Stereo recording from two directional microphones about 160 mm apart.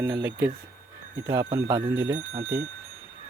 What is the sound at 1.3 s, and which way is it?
Speech, 20° right (ahead or behind).